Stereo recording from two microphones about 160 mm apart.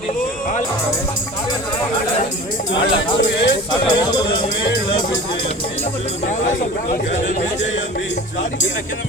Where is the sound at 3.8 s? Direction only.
25° left (ahead or behind).